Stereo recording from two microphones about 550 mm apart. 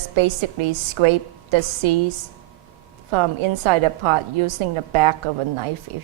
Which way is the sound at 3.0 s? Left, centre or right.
Right.